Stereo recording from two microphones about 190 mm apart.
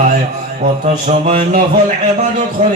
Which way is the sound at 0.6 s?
40° right (ahead or behind).